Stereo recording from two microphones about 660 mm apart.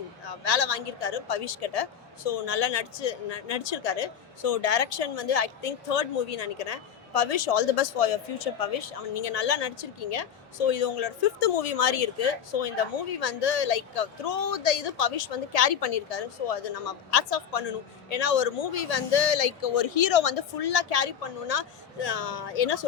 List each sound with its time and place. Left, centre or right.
0.3 s a woman's voice: left